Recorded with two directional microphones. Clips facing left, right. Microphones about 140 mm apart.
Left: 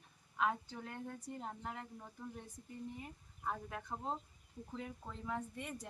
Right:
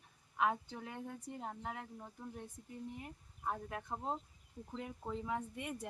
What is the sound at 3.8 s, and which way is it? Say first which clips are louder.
Speech: right 1 dB; 20° right (ahead or behind).